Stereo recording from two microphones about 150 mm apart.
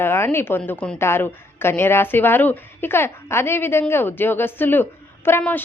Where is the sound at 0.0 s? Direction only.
15° left (ahead or behind).